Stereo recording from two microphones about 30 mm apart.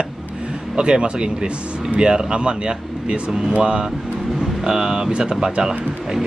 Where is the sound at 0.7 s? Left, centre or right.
Right.